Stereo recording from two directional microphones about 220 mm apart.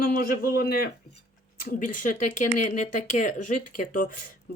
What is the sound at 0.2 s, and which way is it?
A man's voice, 40° left (ahead or behind).